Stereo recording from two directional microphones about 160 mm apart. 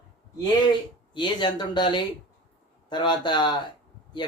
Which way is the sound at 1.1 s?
30° left (ahead or behind).